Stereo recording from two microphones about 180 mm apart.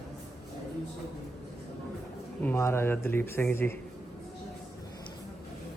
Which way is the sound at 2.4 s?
15° left (ahead or behind).